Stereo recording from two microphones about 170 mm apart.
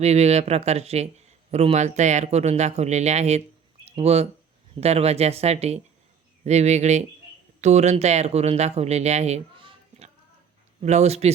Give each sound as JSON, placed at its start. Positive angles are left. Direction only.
{"t": 0.0, "sound": "speech", "side_deg": -40}